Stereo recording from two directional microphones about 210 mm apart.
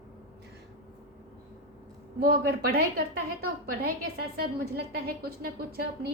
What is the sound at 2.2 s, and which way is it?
Speech, 50° right (ahead or behind).